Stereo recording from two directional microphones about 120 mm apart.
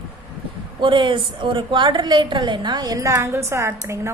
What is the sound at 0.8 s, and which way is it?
A woman's voice, 40° right (ahead or behind).